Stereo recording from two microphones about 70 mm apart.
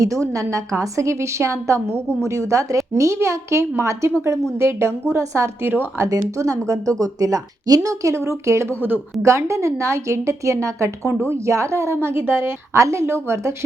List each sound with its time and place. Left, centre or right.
0.0 s a woman's voice: right
5.6 s speech: right
6.1 s a woman's voice: right
7.9 s a woman's voice: right
11.9 s a woman's voice: right
12.7 s a woman's voice: right